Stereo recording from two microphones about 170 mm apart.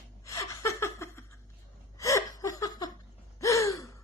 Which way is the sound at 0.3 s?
20° left (ahead or behind).